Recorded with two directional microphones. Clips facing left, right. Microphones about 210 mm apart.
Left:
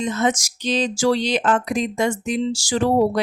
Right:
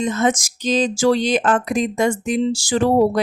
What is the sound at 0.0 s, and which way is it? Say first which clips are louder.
Speech: right 2 dB; 50° right (ahead or behind).